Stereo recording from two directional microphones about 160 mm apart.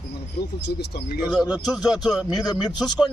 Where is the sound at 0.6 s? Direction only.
90° left.